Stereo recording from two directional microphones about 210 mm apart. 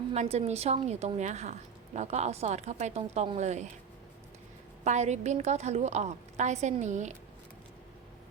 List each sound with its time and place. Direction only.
0.1 s a woman's voice: 30° right (ahead or behind)
4.8 s a woman's voice: 35° right (ahead or behind)